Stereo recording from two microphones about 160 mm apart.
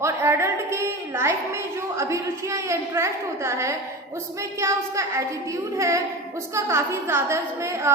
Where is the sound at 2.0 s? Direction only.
20° right (ahead or behind).